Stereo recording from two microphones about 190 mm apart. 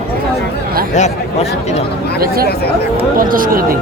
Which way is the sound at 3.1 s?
45° right (ahead or behind).